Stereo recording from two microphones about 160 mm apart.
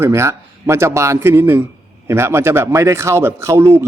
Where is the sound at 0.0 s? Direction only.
15° right (ahead or behind).